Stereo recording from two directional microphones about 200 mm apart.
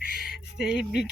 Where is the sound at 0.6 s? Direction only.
5° right (ahead or behind).